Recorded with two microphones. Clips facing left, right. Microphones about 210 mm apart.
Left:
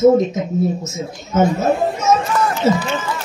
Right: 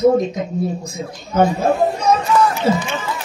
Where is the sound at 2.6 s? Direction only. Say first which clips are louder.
Left 5 dB; 25° left (ahead or behind).